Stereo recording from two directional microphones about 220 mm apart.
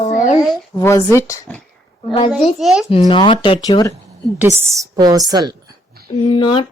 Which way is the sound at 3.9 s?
15° right (ahead or behind).